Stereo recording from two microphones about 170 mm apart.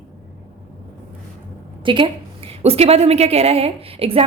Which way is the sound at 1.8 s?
30° right (ahead or behind).